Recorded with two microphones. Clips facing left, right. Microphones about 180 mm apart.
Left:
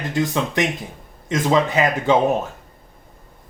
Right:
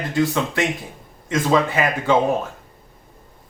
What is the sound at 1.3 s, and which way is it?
Speech, 20° left (ahead or behind).